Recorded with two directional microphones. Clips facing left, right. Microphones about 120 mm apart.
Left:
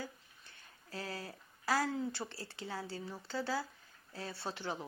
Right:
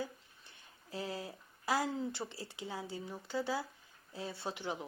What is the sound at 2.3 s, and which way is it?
A woman's voice, 15° right (ahead or behind).